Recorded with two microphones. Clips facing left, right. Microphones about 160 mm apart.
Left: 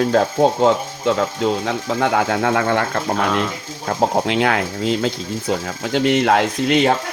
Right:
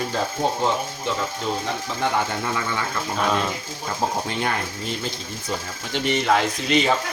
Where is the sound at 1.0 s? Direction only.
80° left.